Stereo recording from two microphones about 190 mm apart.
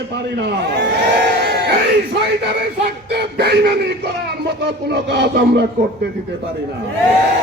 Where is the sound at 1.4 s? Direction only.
60° right (ahead or behind).